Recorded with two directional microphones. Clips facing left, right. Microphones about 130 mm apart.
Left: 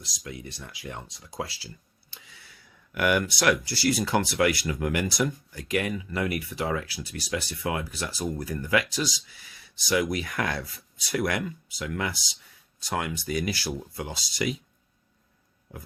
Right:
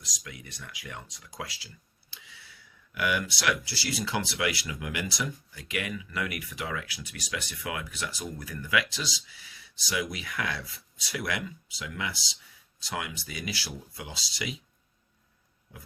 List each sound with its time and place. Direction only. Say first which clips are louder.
0.0 s speech: left 6 dB; 30° left (ahead or behind); by 14.5 s 50° left (ahead or behind)